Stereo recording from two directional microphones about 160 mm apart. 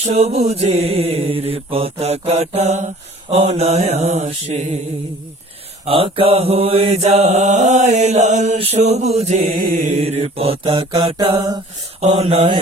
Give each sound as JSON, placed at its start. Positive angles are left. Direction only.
{"t": 0.0, "sound": "mantra", "side_deg": -40}
{"t": 5.8, "sound": "mantra", "side_deg": -35}